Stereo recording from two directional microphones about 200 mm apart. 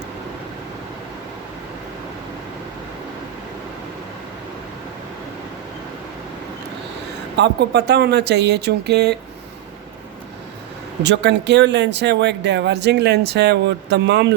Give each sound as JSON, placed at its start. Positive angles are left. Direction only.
{"t": 7.3, "sound": "speech", "side_deg": -60}
{"t": 11.0, "sound": "speech", "side_deg": -60}